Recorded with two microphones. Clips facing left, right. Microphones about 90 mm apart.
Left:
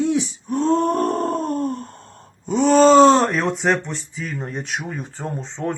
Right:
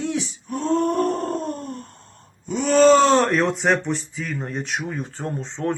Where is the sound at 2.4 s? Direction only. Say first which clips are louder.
Left 3 dB; 35° left (ahead or behind).